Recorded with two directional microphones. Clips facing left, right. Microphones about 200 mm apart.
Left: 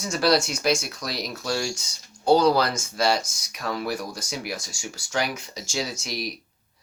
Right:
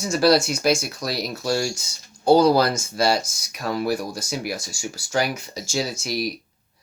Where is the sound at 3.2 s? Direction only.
30° right (ahead or behind).